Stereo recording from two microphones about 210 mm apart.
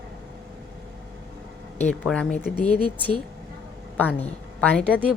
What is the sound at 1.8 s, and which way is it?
Speech, 5° left (ahead or behind).